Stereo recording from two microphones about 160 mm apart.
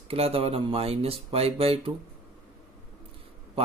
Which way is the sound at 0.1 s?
35° right (ahead or behind).